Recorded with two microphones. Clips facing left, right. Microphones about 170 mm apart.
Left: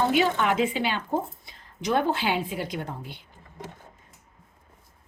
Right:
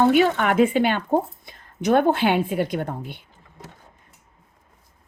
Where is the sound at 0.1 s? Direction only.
55° right (ahead or behind).